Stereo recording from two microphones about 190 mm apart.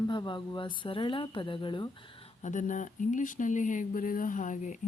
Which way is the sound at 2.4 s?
40° left (ahead or behind).